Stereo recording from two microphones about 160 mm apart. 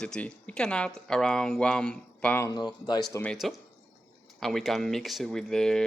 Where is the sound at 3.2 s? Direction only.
Centre (ahead or behind).